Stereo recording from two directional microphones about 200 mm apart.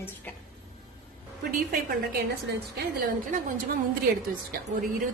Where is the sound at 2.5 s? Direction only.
60° right (ahead or behind).